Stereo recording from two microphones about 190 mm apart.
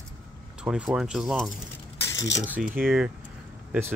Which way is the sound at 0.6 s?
5° right (ahead or behind).